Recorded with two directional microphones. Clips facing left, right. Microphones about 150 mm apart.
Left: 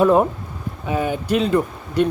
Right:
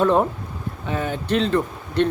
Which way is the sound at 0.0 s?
10° left (ahead or behind).